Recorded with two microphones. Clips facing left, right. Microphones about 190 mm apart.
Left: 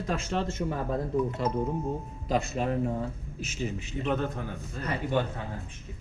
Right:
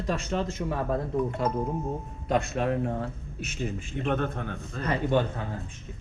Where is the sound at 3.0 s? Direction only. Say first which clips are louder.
Even; 60° right (ahead or behind).